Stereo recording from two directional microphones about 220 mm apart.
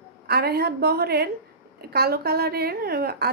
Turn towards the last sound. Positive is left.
turn(degrees=-45)  # may be behind; listen again after turning